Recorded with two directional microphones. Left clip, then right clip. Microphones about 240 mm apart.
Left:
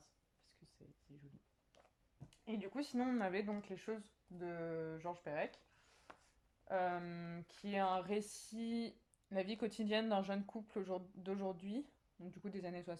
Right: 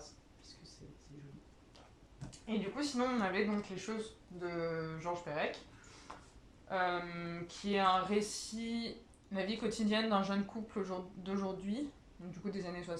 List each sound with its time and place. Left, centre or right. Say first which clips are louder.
2.6 s speech: right 7 dB; left
6.1 s a sound: right 9 dB; left
6.7 s speech: right 4 dB; left